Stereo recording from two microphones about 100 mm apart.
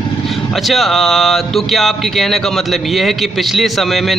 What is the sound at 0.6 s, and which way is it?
Speech, centre (ahead or behind).